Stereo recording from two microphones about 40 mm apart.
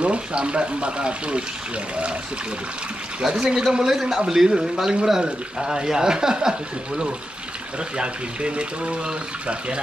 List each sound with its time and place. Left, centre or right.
0.0 s speech: right
3.2 s speech: centre
8.0 s speech: right